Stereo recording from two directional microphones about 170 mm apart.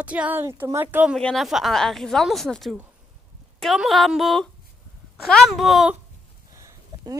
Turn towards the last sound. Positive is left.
turn(degrees=-20)  # may be behind; listen again after turning